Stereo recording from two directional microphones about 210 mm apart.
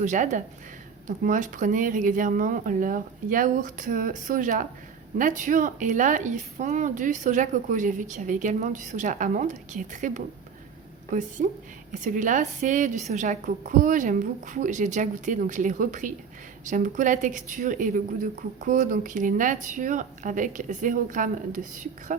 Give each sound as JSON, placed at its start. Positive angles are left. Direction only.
{"t": 0.0, "sound": "a woman's voice", "side_deg": -35}